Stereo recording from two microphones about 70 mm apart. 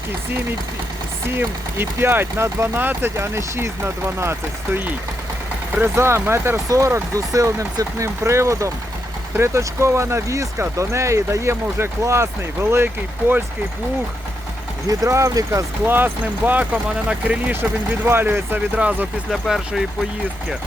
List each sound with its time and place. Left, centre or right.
1.4 s speech: right
6.0 s speech: right
6.7 s speech: right
14.8 s speech: right
15.9 s speech: right
17.5 s speech: right
18.8 s speech: centre
19.3 s speech: centre